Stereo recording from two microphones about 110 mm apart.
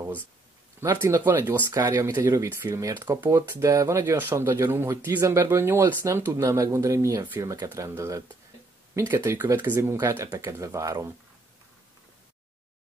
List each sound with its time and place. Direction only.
1.0 s speech: 20° right (ahead or behind)
1.7 s speech: 30° right (ahead or behind)